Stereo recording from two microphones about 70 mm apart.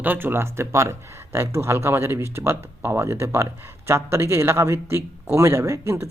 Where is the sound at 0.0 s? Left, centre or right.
Right.